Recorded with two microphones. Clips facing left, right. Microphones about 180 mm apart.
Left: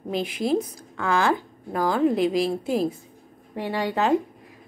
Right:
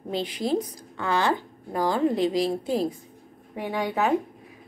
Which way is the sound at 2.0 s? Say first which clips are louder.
Left 3 dB; 10° left (ahead or behind).